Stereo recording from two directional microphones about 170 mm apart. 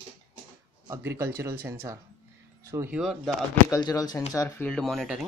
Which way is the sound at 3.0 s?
Centre (ahead or behind).